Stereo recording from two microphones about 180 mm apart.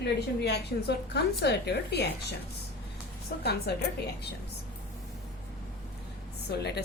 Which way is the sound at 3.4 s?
65° left (ahead or behind).